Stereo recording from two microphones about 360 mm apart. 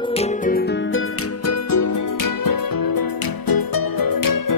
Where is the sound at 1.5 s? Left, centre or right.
Left.